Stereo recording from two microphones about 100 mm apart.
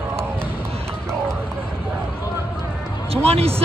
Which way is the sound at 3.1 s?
85° right.